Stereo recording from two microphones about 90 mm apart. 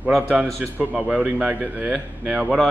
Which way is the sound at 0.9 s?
10° right (ahead or behind).